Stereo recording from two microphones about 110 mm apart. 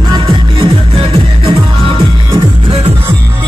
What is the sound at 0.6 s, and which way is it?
Music, 50° right (ahead or behind).